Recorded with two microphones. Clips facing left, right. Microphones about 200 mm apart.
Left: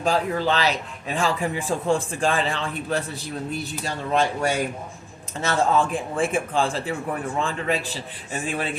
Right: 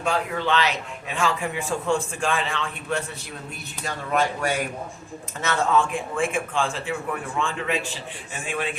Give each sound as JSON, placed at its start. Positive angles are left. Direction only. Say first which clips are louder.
{"t": 0.0, "sound": "a man's voice", "louder": "left 3 dB", "side_deg": 35}